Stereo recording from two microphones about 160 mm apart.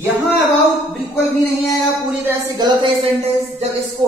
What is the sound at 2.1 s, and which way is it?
Speech, 15° right (ahead or behind).